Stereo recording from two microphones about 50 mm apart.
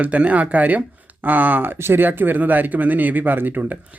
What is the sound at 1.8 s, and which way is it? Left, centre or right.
Speech, right.